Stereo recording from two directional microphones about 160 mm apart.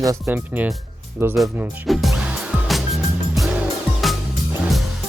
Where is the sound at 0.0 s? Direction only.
15° right (ahead or behind).